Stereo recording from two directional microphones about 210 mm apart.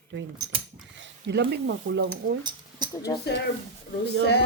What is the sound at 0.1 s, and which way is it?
Speech, 65° right (ahead or behind).